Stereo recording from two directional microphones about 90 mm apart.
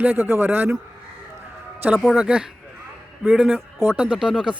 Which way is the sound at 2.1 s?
10° right (ahead or behind).